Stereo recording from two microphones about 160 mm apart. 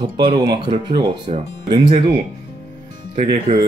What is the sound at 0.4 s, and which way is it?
Speech, 30° right (ahead or behind).